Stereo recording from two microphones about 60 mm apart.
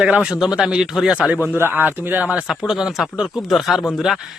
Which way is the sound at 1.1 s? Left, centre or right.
Centre.